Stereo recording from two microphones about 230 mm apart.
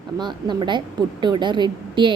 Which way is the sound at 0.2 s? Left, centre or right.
Centre.